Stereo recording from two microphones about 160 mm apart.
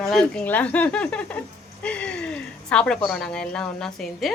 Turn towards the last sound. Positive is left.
turn(degrees=0)  # may be behind; listen again after turning